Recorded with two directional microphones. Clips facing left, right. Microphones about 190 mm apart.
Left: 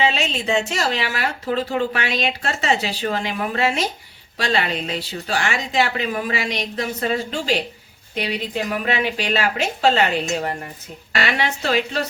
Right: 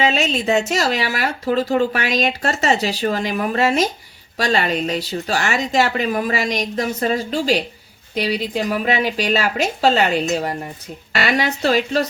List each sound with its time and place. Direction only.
0.0 s a woman's voice: 40° right (ahead or behind)